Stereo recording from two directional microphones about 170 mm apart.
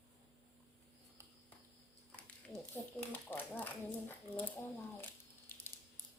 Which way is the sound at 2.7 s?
15° left (ahead or behind).